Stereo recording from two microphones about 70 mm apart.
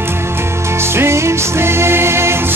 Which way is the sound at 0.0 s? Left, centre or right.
Right.